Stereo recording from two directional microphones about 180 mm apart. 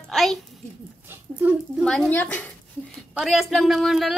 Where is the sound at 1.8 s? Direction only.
5° left (ahead or behind).